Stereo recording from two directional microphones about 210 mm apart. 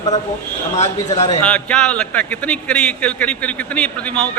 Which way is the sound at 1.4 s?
5° left (ahead or behind).